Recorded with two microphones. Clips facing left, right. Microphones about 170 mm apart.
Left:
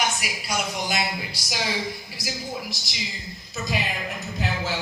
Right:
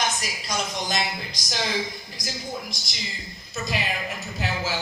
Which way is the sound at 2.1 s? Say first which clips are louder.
Right 2 dB; 5° left (ahead or behind).